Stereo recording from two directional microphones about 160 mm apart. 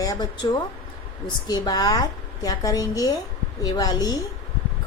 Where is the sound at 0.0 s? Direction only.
20° left (ahead or behind).